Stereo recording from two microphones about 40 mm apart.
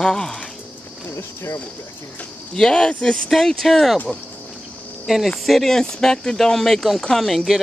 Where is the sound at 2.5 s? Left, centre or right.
Centre.